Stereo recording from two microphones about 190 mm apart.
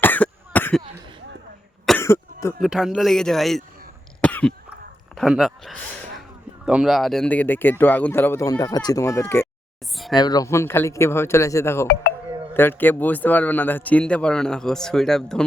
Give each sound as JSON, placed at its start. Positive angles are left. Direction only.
{"t": 0.0, "sound": "cough", "side_deg": 10}
{"t": 2.0, "sound": "cough", "side_deg": 15}
{"t": 2.6, "sound": "speech", "side_deg": 0}
{"t": 4.2, "sound": "cough", "side_deg": 5}
{"t": 5.1, "sound": "a man's voice", "side_deg": 0}